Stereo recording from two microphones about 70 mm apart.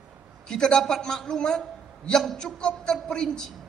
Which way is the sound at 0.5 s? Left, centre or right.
Centre.